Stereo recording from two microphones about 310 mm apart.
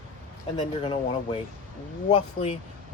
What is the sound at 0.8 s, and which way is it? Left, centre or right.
Speech, centre.